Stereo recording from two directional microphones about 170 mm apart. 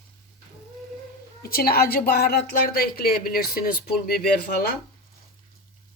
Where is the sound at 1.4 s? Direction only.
60° left (ahead or behind).